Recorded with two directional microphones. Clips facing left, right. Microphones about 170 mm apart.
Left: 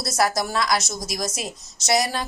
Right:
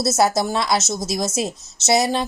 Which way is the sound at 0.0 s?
25° right (ahead or behind).